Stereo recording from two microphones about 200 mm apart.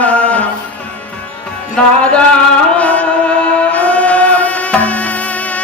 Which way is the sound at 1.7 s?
5° left (ahead or behind).